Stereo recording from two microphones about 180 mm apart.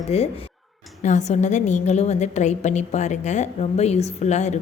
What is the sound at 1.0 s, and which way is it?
A woman's voice, 40° left (ahead or behind).